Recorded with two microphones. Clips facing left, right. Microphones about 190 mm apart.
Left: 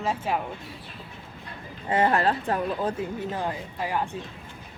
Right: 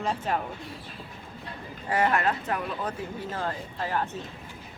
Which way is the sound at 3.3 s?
15° left (ahead or behind).